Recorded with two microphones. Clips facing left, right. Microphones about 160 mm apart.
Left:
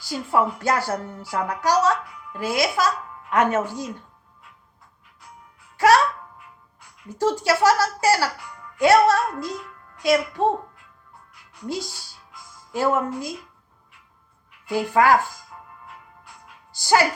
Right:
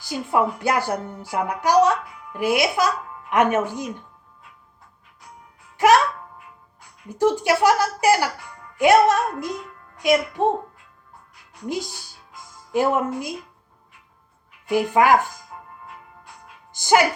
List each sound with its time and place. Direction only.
0.0 s a woman's voice: 15° right (ahead or behind)
5.7 s music: 15° right (ahead or behind)
7.1 s a woman's voice: 15° right (ahead or behind)
11.7 s a woman's voice: 15° right (ahead or behind)
14.7 s a woman's voice: 20° right (ahead or behind)
16.7 s speech: 20° right (ahead or behind)